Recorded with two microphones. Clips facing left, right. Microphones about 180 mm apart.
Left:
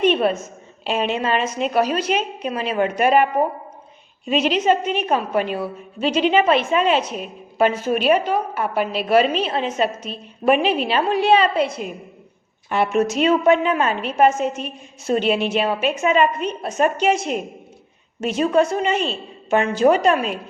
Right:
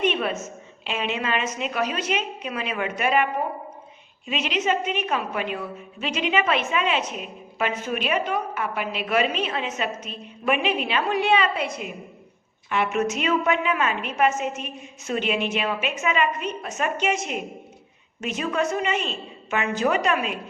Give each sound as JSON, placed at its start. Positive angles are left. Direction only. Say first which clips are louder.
{"t": 0.0, "sound": "a sound", "louder": "left 6 dB", "side_deg": 35}
{"t": 0.9, "sound": "a woman's voice", "louder": "left 6 dB", "side_deg": 35}
{"t": 4.3, "sound": "a woman's voice", "louder": "left 7 dB", "side_deg": 35}